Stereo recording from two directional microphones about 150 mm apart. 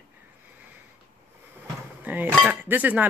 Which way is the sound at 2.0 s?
10° right (ahead or behind).